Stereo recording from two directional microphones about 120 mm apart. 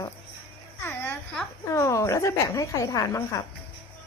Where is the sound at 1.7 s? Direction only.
25° left (ahead or behind).